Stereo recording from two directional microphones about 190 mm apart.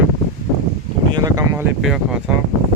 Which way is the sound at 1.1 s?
20° right (ahead or behind).